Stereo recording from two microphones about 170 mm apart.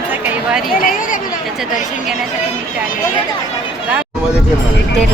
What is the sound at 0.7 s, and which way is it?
Speech, 55° left (ahead or behind).